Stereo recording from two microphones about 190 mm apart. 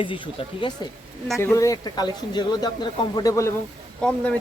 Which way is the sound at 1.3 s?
15° left (ahead or behind).